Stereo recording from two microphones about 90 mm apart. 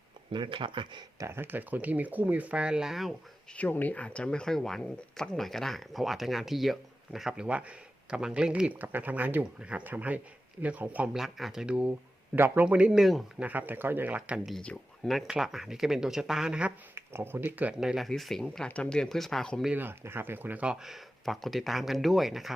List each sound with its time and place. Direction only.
0.3 s speech: 65° right (ahead or behind)
1.2 s speech: 25° right (ahead or behind); by 3.2 s centre (ahead or behind)
3.5 s speech: 20° left (ahead or behind); by 11.1 s 15° right (ahead or behind)
11.1 s speech: 5° right (ahead or behind)
13.4 s speech: 20° right (ahead or behind)
14.2 s speech: 10° right (ahead or behind)
14.5 s speech: 10° left (ahead or behind)
15.0 s speech: 5° right (ahead or behind)
16.9 s speech: 25° right (ahead or behind)
17.7 s speech: 5° right (ahead or behind)
19.7 s speech: 25° right (ahead or behind)
20.8 s speech: centre (ahead or behind)